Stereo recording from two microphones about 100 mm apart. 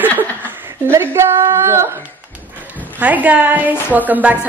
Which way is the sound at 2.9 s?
15° right (ahead or behind).